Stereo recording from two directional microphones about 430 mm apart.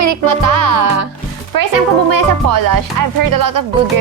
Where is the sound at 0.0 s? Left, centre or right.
Right.